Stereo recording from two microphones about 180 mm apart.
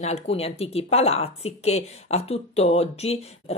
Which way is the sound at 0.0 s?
35° left (ahead or behind).